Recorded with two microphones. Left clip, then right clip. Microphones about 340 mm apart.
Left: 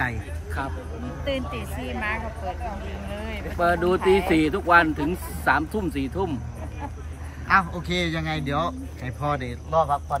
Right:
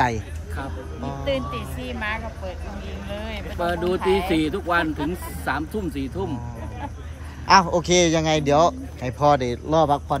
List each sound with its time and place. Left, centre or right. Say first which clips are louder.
0.0 s speech: right 6 dB; centre
3.5 s speech: left 3 dB; centre
7.4 s speech: right 5 dB; centre
7.8 s a man's voice: right 8 dB; right
8.5 s speech: right 10 dB; centre